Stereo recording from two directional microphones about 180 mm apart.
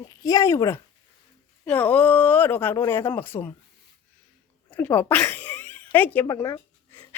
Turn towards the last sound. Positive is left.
turn(degrees=15)  # may be behind; listen again after turning